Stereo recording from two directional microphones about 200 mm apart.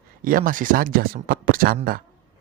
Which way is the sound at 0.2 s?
45° right (ahead or behind).